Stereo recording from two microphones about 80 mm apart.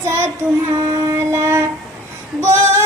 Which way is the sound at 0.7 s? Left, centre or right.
Right.